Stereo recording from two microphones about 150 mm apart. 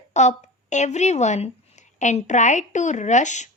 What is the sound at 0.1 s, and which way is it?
Speech, 50° left (ahead or behind).